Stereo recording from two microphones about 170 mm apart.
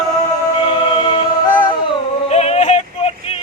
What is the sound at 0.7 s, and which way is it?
Choir, 25° left (ahead or behind).